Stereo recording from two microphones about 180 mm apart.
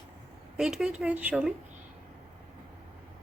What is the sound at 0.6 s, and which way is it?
Speech, 5° right (ahead or behind).